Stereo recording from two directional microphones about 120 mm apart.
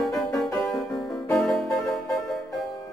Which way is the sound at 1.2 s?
Centre (ahead or behind).